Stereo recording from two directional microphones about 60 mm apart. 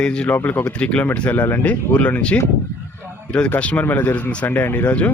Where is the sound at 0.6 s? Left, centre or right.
Centre.